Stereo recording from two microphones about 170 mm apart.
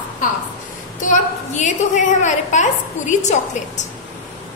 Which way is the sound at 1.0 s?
45° left (ahead or behind).